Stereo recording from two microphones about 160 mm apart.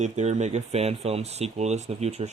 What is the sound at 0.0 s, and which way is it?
Speech, 45° right (ahead or behind).